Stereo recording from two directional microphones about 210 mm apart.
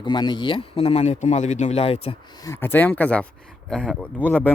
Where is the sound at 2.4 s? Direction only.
10° left (ahead or behind).